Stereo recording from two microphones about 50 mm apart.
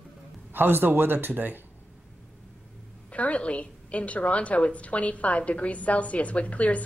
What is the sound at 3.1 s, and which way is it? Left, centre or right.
A woman's voice, left.